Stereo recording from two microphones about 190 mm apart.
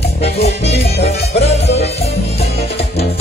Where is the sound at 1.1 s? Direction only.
35° left (ahead or behind).